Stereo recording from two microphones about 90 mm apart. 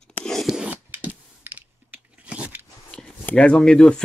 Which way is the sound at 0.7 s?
20° right (ahead or behind).